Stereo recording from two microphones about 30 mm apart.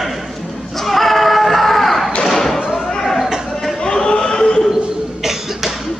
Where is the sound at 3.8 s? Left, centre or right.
Left.